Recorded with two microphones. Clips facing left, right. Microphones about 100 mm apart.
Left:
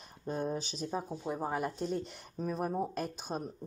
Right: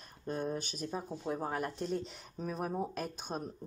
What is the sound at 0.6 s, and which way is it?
Speech, 90° left.